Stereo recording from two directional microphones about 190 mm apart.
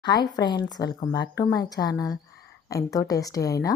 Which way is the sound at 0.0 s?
20° left (ahead or behind).